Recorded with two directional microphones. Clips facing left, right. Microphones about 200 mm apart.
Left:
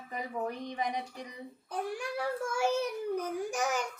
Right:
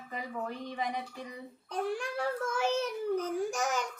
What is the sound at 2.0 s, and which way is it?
A child's voice, 10° left (ahead or behind).